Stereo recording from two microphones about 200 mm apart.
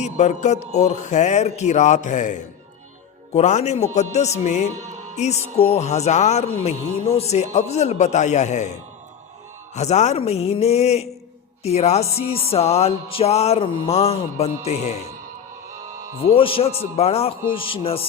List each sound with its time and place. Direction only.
0.0 s speech: 35° left (ahead or behind)
9.7 s speech: 35° left (ahead or behind)
16.3 s music: 25° left (ahead or behind)
17.0 s speech: 30° left (ahead or behind)
17.5 s music: 25° left (ahead or behind)